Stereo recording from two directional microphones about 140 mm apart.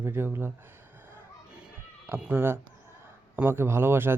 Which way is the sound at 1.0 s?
5° right (ahead or behind).